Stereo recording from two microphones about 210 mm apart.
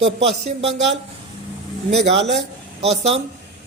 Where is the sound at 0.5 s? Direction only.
30° right (ahead or behind).